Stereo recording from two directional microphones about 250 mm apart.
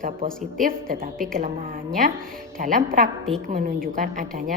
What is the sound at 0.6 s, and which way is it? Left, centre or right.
Speech, right.